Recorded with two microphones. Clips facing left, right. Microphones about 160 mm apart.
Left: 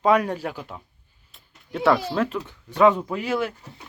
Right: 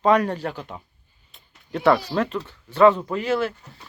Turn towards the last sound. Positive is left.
turn(degrees=10)  # may be behind; listen again after turning